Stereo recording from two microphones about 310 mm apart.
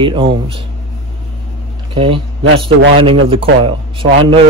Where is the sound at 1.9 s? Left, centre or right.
Centre.